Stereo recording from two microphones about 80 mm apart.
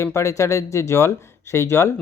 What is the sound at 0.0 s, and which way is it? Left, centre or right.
Speech, left.